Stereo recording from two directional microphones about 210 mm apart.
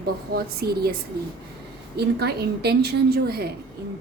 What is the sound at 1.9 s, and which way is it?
Speech, 50° right (ahead or behind).